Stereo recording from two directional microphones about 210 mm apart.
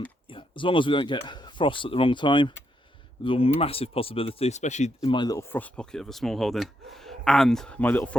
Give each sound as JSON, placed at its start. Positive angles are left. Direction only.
{"t": 0.3, "sound": "a man's voice", "side_deg": 25}
{"t": 4.9, "sound": "speech", "side_deg": 20}